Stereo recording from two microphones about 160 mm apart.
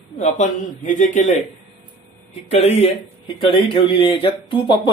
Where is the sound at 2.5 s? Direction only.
40° left (ahead or behind).